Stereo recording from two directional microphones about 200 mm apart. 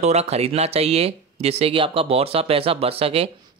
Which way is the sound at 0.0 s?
30° right (ahead or behind).